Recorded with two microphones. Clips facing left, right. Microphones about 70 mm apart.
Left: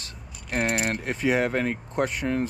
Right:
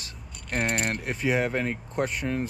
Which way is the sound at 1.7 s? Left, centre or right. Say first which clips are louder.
Left 2 dB; left.